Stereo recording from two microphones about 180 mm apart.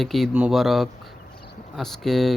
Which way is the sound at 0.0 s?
Centre (ahead or behind).